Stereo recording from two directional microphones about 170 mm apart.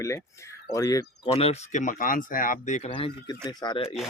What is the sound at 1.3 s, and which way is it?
Speech, 35° left (ahead or behind).